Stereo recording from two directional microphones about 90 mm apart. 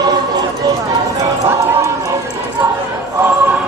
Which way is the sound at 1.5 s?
30° right (ahead or behind).